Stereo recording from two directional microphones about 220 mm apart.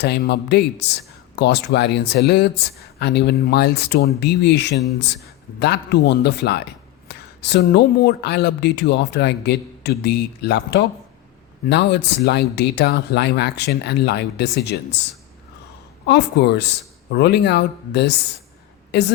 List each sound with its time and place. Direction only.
0.0 s speech: 50° left (ahead or behind)
16.0 s speech: 50° left (ahead or behind)